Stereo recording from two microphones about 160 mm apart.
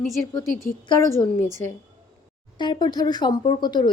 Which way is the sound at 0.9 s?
20° left (ahead or behind).